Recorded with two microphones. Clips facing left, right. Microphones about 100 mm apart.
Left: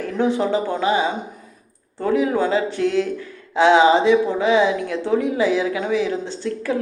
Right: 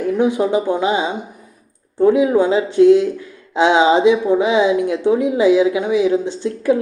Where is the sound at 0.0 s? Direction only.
15° right (ahead or behind).